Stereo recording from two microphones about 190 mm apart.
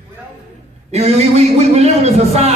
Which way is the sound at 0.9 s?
35° right (ahead or behind).